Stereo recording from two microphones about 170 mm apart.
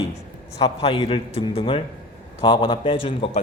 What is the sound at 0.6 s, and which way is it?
A man's voice, 35° left (ahead or behind).